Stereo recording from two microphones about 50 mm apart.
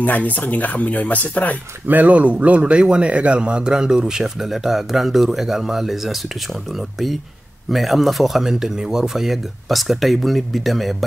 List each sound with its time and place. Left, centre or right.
0.0 s speech: left
1.9 s speech: right; by 11.1 s centre